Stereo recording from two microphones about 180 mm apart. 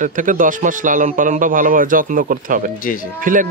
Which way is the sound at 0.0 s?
45° right (ahead or behind).